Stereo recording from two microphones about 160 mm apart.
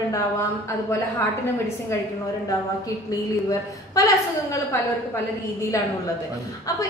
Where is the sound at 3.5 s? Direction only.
20° left (ahead or behind).